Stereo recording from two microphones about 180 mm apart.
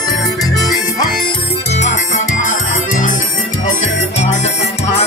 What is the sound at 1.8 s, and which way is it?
Music, 40° left (ahead or behind).